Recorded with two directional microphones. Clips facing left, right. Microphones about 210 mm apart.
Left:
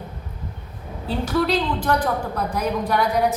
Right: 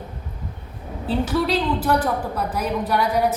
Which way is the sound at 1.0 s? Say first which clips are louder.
Even; 5° right (ahead or behind).